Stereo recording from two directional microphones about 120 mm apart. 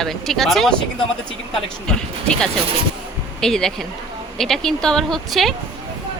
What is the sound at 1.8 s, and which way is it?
Speech, 5° left (ahead or behind).